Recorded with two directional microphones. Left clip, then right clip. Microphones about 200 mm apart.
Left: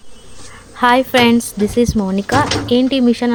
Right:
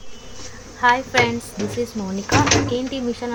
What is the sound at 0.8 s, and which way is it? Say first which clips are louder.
Speech: left 5 dB; 45° left (ahead or behind).